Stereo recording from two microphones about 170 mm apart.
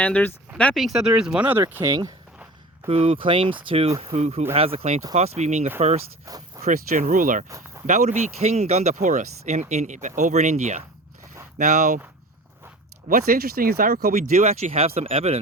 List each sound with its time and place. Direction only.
0.0 s speech: 10° left (ahead or behind)
0.7 s speech: centre (ahead or behind); by 2.1 s 20° right (ahead or behind)
2.8 s speech: 35° right (ahead or behind); by 7.4 s 50° right (ahead or behind)
7.4 s speech: 20° right (ahead or behind)
7.9 s speech: 45° right (ahead or behind)
13.1 s speech: 60° right (ahead or behind)
14.1 s speech: 40° right (ahead or behind)